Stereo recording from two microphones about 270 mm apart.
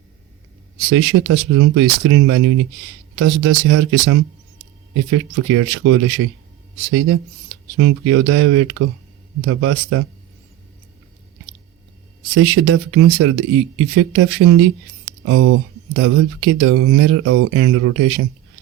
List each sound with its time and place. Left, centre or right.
0.9 s speech: right
7.8 s speech: right
12.3 s speech: right